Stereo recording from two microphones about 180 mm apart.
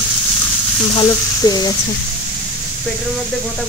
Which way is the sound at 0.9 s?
20° left (ahead or behind).